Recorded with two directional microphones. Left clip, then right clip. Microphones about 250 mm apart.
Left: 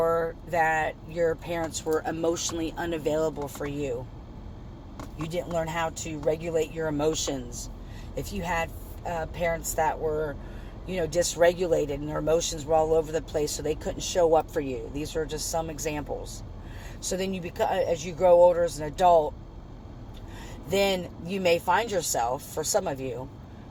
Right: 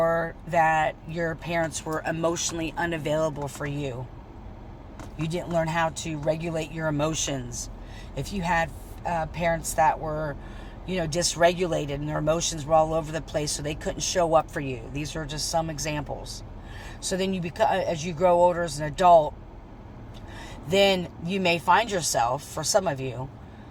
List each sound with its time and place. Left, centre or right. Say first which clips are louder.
0.0 s speech: right 1 dB; centre
1.8 s speech: even; right
3.6 s speech: left 2 dB; centre
5.3 s speech: right 3 dB; centre
20.8 s speech: right 4 dB; centre